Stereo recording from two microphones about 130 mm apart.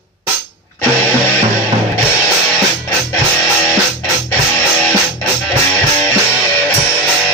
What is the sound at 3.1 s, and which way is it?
Music, 15° left (ahead or behind).